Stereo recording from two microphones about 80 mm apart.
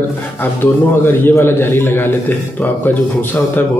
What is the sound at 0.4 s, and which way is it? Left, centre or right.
A man's voice, left.